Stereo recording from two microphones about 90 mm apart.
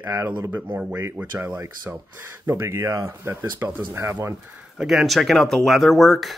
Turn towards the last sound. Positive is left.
turn(degrees=0)  # may be behind; listen again after turning